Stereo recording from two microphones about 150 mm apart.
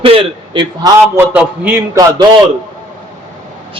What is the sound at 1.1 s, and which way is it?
Speech, 10° right (ahead or behind).